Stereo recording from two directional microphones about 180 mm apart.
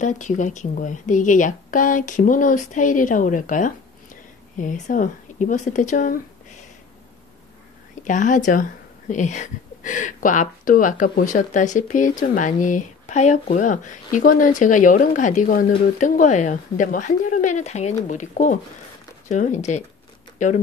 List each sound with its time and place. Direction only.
0.0 s speech: 45° left (ahead or behind)
8.0 s speech: 45° left (ahead or behind)